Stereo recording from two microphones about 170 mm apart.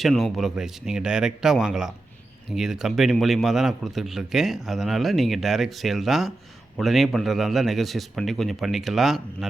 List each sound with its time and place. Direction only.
0.0 s a man's voice: centre (ahead or behind)